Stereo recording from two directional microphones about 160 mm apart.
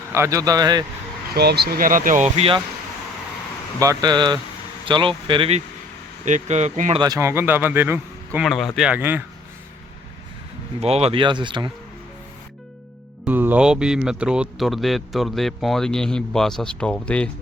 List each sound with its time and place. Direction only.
0.1 s a man's voice: 20° right (ahead or behind)
1.3 s speech: 90° right; by 2.6 s 40° right (ahead or behind)
3.8 s a man's voice: 25° right (ahead or behind)
6.2 s speech: 50° right (ahead or behind)
6.9 s a man's voice: 25° right (ahead or behind)
8.4 s speech: centre (ahead or behind)
10.8 s speech: 40° right (ahead or behind)
13.2 s speech: 10° right (ahead or behind); by 17.2 s 5° left (ahead or behind)